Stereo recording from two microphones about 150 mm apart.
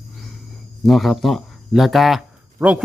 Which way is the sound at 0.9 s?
Centre (ahead or behind).